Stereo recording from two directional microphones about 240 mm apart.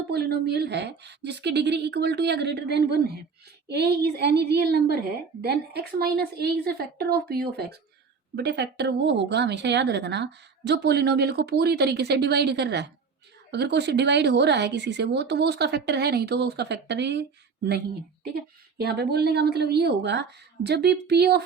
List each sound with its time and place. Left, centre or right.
0.1 s speech: right